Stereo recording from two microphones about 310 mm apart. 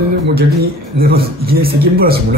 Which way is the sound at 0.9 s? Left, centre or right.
Right.